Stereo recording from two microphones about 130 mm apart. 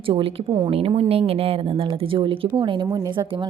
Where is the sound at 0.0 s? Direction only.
40° right (ahead or behind).